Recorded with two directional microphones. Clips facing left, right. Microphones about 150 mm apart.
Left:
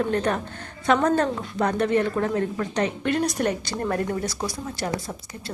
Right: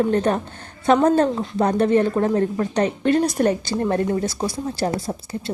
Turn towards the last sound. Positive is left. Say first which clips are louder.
# right 5 dB
turn(degrees=-30)  # may be behind; listen again after turning